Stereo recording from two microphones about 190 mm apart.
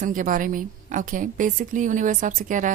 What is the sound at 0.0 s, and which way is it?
A woman's voice, 45° right (ahead or behind).